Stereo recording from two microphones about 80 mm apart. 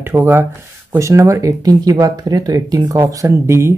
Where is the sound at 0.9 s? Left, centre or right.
Right.